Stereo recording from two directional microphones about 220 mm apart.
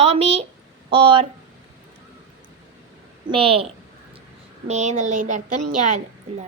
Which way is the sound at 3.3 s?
25° right (ahead or behind).